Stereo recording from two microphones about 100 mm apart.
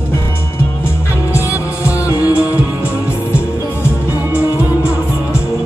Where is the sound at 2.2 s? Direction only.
15° right (ahead or behind).